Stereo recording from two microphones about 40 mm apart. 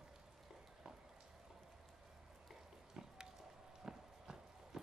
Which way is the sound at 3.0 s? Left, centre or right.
Centre.